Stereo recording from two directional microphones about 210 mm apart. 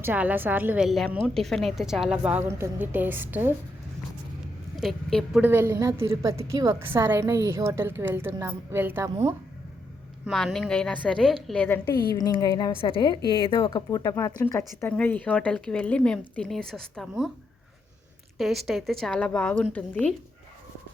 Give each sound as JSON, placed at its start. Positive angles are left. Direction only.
{"t": 0.0, "sound": "a woman's voice", "side_deg": -10}
{"t": 4.8, "sound": "a woman's voice", "side_deg": 0}
{"t": 10.2, "sound": "a woman's voice", "side_deg": 0}
{"t": 18.3, "sound": "a woman's voice", "side_deg": 0}